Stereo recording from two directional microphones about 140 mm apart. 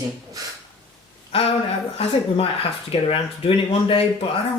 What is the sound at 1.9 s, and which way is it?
Speech, 45° left (ahead or behind).